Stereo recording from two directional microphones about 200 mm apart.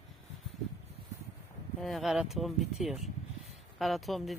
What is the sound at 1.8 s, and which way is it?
Speech, centre (ahead or behind).